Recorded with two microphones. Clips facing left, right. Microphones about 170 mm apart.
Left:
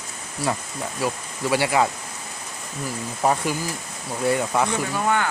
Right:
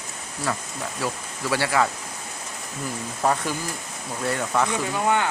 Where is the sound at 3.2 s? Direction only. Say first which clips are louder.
Left 2 dB; 15° left (ahead or behind).